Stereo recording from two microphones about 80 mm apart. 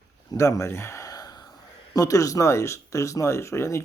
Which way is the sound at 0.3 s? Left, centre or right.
Left.